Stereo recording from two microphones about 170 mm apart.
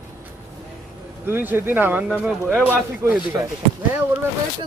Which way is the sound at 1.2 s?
10° right (ahead or behind).